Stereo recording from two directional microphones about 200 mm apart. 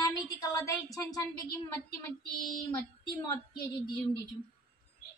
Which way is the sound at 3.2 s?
25° left (ahead or behind).